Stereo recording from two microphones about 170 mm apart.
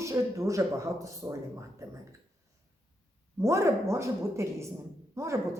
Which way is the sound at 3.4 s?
15° right (ahead or behind).